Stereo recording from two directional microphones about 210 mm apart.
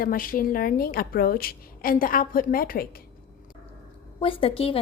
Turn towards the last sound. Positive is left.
turn(degrees=25)  # may be behind; listen again after turning